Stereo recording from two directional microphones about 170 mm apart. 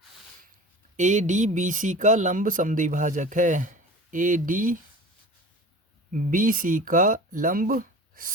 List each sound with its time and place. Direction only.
0.9 s speech: 45° right (ahead or behind)
6.1 s speech: 55° right (ahead or behind)